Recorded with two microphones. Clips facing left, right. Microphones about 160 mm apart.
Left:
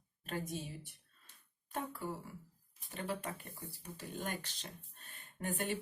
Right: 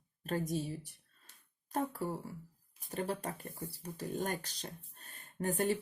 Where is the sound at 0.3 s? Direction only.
40° right (ahead or behind).